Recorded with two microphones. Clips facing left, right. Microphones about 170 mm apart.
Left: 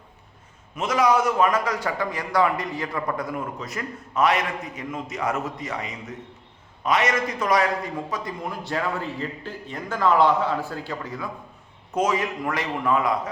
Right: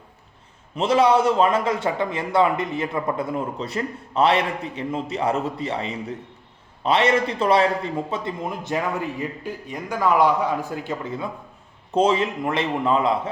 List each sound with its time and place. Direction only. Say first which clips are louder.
0.8 s a man's voice: right 3 dB; 30° right (ahead or behind)